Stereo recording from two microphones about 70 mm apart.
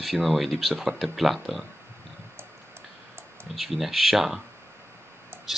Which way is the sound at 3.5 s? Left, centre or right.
Centre.